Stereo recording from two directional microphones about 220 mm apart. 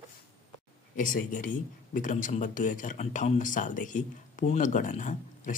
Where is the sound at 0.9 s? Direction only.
35° left (ahead or behind).